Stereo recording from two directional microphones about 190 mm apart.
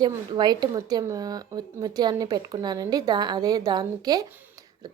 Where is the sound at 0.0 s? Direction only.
20° right (ahead or behind).